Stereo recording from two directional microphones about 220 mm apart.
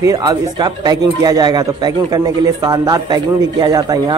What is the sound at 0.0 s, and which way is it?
A man's voice, 15° right (ahead or behind).